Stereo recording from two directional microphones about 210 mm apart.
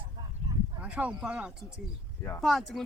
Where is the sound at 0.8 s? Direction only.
5° right (ahead or behind).